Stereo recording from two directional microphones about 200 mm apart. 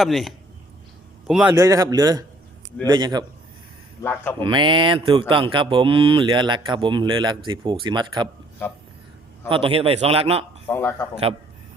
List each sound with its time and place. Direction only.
0.0 s a man's voice: centre (ahead or behind); by 3.2 s 20° right (ahead or behind)
4.0 s a man's voice: 10° left (ahead or behind)
4.4 s speech: 25° right (ahead or behind)
9.5 s speech: 25° right (ahead or behind)
10.7 s a man's voice: 10° left (ahead or behind)